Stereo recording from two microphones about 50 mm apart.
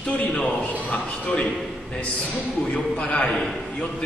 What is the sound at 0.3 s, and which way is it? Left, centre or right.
A man's voice, left.